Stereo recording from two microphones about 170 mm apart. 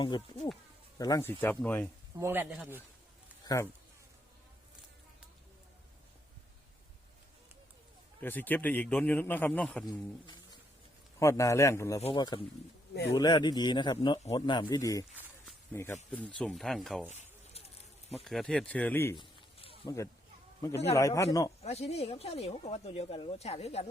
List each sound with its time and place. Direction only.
0.0 s a man's voice: 30° left (ahead or behind); by 1.9 s 10° left (ahead or behind)
2.1 s speech: 15° right (ahead or behind)
3.4 s a man's voice: 20° left (ahead or behind)
8.2 s a man's voice: 10° left (ahead or behind)
9.9 s a man's voice: 25° left (ahead or behind)
11.9 s speech: 35° left (ahead or behind)
13.1 s a man's voice: 25° left (ahead or behind); by 17.1 s centre (ahead or behind)
17.1 s a sound: 35° left (ahead or behind)
18.1 s a man's voice: centre (ahead or behind)
19.1 s a sound: 30° left (ahead or behind)
20.6 s a man's voice: 15° left (ahead or behind)
21.6 s speech: 40° left (ahead or behind)